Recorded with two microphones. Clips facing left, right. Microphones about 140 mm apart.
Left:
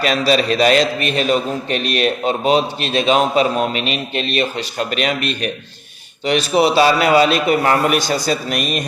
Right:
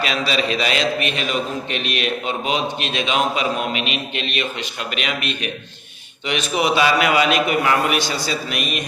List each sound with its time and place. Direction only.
0.0 s a man's voice: 40° left (ahead or behind)